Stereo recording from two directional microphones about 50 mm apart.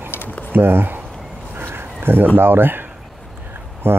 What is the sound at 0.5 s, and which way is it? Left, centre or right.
Speech, right.